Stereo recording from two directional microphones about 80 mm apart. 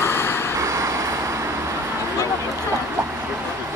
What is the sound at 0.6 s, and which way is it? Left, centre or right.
Vehicle, right.